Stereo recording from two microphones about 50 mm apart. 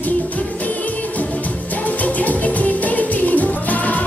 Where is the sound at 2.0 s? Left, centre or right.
Left.